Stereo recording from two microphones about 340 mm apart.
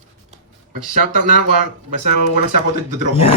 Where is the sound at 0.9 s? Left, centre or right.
Right.